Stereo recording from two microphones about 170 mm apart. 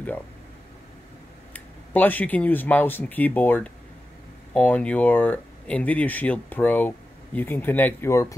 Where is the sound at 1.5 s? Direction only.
10° left (ahead or behind).